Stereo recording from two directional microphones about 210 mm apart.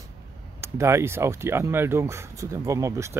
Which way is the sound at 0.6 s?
15° right (ahead or behind).